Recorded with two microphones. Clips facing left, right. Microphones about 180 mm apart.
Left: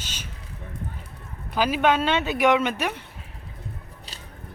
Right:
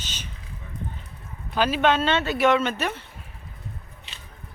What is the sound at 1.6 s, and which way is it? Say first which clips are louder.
Speech: even; 10° left (ahead or behind).